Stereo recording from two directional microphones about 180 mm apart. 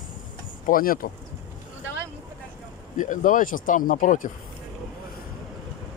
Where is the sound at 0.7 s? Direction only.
50° left (ahead or behind).